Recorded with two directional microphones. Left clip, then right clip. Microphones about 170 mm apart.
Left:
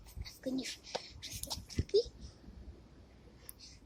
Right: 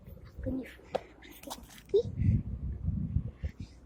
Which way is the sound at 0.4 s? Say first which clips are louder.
Right 1 dB; 85° left.